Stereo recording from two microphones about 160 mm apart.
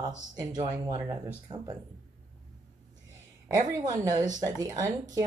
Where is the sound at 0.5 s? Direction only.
45° right (ahead or behind).